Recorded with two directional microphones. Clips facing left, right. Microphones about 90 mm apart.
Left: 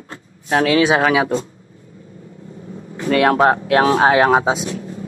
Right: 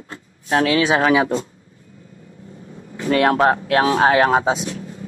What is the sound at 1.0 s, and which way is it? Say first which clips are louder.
Speech: even; 10° left (ahead or behind).